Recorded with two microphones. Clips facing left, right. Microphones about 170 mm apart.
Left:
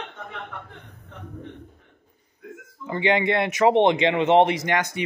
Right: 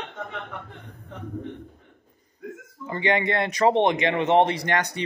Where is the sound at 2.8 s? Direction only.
20° left (ahead or behind).